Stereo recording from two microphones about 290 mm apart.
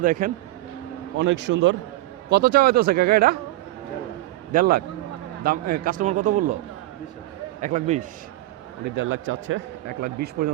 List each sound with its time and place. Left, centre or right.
0.0 s a man's voice: right
1.1 s speech: right
4.5 s a man's voice: right
7.6 s a man's voice: right
9.0 s speech: right
10.0 s speech: right